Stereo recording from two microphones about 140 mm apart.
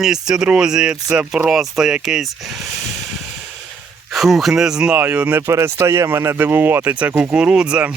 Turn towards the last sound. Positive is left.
turn(degrees=-5)  # may be behind; listen again after turning